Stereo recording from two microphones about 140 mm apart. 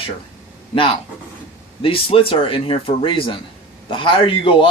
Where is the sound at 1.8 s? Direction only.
40° left (ahead or behind).